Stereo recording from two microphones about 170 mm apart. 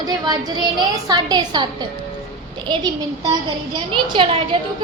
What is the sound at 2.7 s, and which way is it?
A child's voice, 25° right (ahead or behind).